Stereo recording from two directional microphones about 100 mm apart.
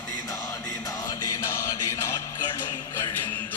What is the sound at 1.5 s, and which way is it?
Chant, 30° left (ahead or behind).